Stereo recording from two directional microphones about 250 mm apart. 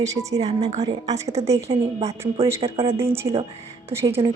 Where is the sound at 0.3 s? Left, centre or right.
Right.